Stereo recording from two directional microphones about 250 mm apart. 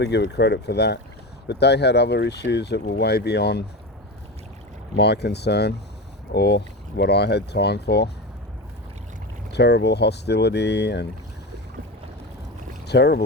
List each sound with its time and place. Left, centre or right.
0.0 s speech: left
4.9 s speech: left
9.5 s speech: left
12.9 s speech: left